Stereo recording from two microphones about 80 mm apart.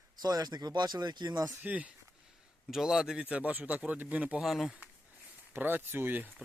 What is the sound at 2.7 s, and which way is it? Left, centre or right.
Speech, centre.